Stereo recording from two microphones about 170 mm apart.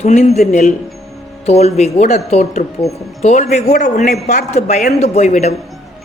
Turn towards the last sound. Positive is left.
turn(degrees=40)  # may be behind; listen again after turning